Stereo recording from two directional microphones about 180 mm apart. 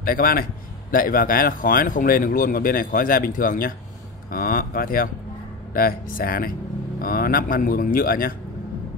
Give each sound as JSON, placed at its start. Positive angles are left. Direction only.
{"t": 0.0, "sound": "speech", "side_deg": 55}